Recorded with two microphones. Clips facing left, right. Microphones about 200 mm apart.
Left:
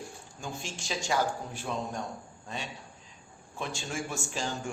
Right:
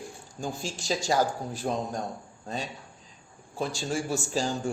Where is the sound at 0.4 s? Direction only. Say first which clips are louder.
Right 6 dB; 35° right (ahead or behind).